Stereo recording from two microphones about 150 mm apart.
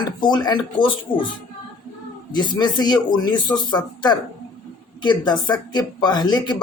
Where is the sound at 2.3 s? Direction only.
30° left (ahead or behind).